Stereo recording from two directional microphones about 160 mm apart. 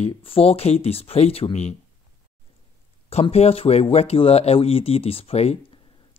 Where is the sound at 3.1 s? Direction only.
40° left (ahead or behind).